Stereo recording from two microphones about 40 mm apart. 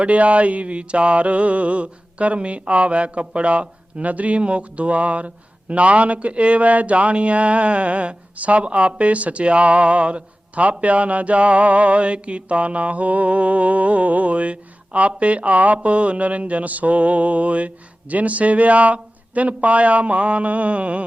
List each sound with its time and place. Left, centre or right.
0.0 s mantra: right